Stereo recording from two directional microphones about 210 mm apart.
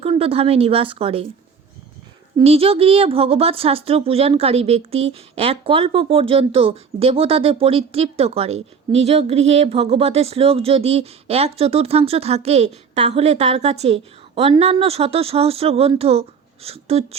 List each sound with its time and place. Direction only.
0.0 s speech: 30° right (ahead or behind)
2.4 s speech: 30° right (ahead or behind)